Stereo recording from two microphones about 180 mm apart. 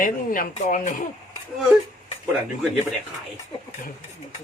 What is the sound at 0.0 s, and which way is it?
Speech, 50° left (ahead or behind).